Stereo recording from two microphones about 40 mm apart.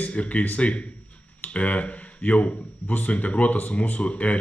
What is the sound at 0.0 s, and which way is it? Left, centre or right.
Speech, left.